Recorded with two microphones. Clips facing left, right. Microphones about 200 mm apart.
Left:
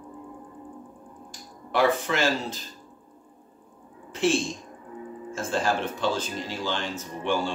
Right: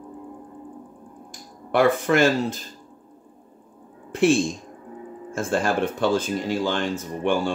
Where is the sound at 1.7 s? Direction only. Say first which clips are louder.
Right 4 dB; 55° right (ahead or behind).